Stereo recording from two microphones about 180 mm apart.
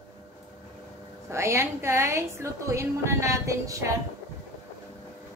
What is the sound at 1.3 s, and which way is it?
A woman's voice, 15° right (ahead or behind).